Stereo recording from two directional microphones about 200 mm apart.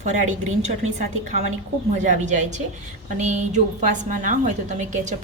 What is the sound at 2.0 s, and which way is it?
A woman's voice, 35° right (ahead or behind).